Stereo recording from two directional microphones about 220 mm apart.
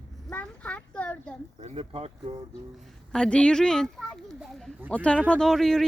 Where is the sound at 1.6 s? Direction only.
25° right (ahead or behind).